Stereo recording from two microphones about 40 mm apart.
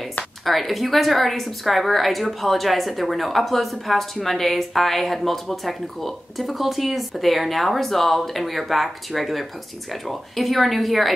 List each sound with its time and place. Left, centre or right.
0.5 s a woman's voice: centre